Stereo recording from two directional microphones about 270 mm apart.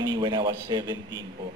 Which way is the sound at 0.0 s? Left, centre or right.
Centre.